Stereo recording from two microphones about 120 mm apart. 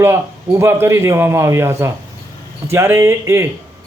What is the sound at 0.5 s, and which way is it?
A man's voice, 20° right (ahead or behind).